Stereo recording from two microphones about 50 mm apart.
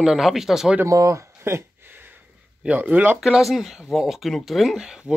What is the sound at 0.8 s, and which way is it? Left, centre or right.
Speech, right.